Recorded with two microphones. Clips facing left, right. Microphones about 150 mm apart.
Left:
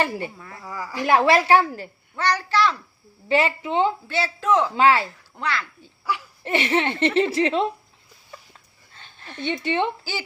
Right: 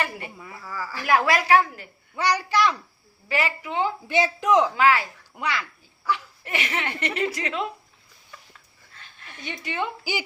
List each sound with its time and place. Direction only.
0.0 s speech: 30° left (ahead or behind)
0.3 s a woman's voice: 5° right (ahead or behind)
0.6 s speech: 20° left (ahead or behind)
2.1 s a woman's voice: 10° right (ahead or behind)
3.2 s speech: 25° left (ahead or behind)
4.1 s a woman's voice: 15° right (ahead or behind)
4.7 s speech: 30° left (ahead or behind)
5.3 s a woman's voice: 15° right (ahead or behind)
6.4 s speech: 30° left (ahead or behind)
8.9 s dog: 30° left (ahead or behind)
9.4 s speech: 30° left (ahead or behind)
10.0 s a woman's voice: 15° right (ahead or behind)